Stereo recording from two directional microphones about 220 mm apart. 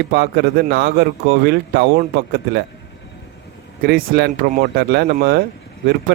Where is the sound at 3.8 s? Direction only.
50° right (ahead or behind).